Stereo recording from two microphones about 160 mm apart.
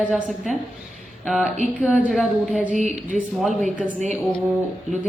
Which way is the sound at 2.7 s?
50° right (ahead or behind).